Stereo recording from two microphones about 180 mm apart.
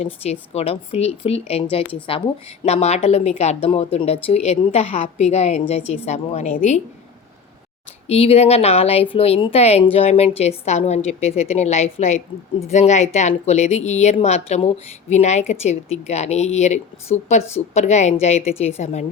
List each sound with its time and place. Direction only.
0.0 s a woman's voice: 35° left (ahead or behind)
8.0 s a woman's voice: 35° left (ahead or behind)